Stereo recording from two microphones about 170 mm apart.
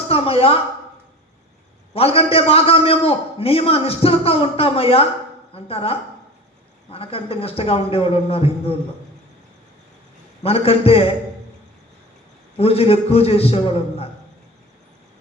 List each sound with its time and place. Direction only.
0.1 s speech: 35° left (ahead or behind)
1.9 s a man's voice: 35° left (ahead or behind)
10.4 s a man's voice: 35° left (ahead or behind)
12.5 s a man's voice: 35° left (ahead or behind)